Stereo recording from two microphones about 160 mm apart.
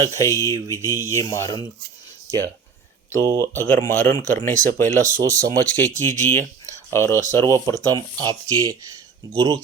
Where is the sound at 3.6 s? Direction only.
15° left (ahead or behind).